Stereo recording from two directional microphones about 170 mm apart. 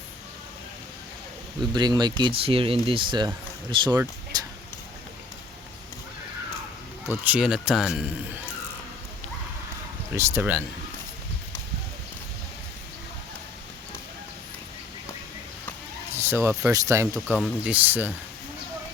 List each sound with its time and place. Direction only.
1.7 s speech: 25° right (ahead or behind)
4.3 s a sound: 25° right (ahead or behind)
7.3 s speech: 5° right (ahead or behind)
10.2 s speech: 15° right (ahead or behind)
16.1 s speech: 15° right (ahead or behind)
17.2 s speech: 5° right (ahead or behind)